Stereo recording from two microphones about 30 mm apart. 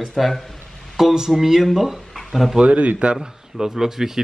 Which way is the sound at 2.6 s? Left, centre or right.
Right.